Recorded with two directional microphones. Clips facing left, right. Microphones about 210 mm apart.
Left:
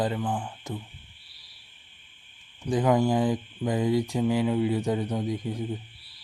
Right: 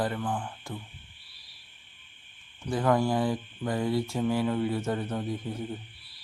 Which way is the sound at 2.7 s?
15° left (ahead or behind).